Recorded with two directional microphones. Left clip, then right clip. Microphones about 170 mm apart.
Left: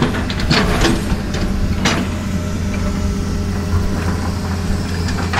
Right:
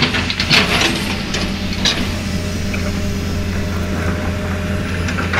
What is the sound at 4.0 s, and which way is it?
Boat, 60° left (ahead or behind).